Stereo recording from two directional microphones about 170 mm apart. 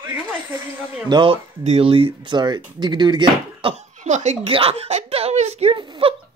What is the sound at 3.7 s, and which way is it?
Speech, 45° right (ahead or behind).